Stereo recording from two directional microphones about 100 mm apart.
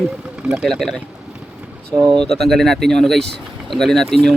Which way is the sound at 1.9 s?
35° right (ahead or behind).